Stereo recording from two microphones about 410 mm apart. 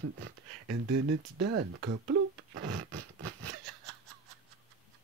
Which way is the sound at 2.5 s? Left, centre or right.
Right.